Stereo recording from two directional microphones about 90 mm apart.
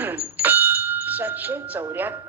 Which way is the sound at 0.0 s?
20° right (ahead or behind).